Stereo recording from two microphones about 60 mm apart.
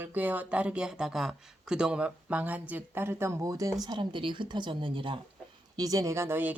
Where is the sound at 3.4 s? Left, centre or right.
Right.